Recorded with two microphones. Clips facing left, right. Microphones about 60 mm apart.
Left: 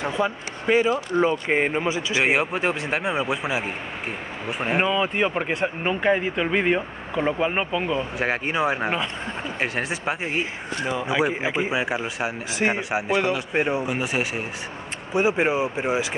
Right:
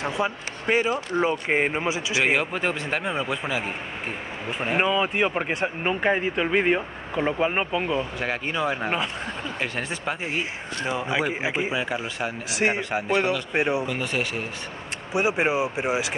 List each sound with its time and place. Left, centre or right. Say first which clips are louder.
0.2 s speech: left 2 dB; centre
2.2 s speech: left 2 dB; centre
4.7 s speech: even; centre
8.2 s speech: left 3 dB; left
10.9 s speech: left 2 dB; centre
11.7 s speech: left 2 dB; centre
13.5 s speech: left 1 dB; centre
13.8 s speech: left 2 dB; centre
15.1 s speech: left 2 dB; centre